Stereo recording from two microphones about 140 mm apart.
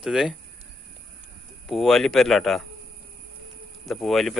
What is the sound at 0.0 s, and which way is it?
Speech, 5° right (ahead or behind).